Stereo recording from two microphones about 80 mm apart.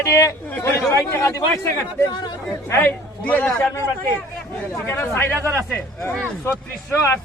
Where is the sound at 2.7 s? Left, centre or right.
Left.